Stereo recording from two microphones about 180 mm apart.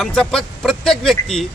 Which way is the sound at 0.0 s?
5° left (ahead or behind).